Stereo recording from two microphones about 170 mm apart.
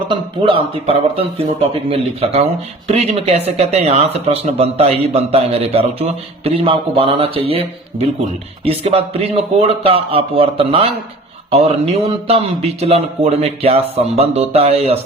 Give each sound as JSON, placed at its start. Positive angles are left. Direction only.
{"t": 0.1, "sound": "speech", "side_deg": -30}